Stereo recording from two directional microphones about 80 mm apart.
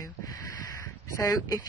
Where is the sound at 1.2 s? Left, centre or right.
Left.